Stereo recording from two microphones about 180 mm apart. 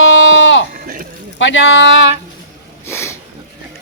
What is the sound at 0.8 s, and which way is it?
Speech, 50° right (ahead or behind).